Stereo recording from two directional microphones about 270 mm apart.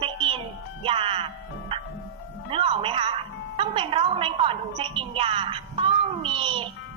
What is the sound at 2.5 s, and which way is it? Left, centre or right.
Speech, centre.